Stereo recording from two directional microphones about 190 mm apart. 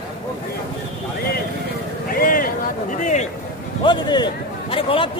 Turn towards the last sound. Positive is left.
turn(degrees=30)  # may be behind; listen again after turning